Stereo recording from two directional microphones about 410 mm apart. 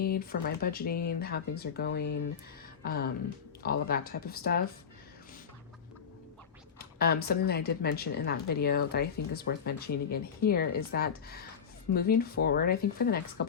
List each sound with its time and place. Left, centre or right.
0.0 s speech: left
6.7 s speech: left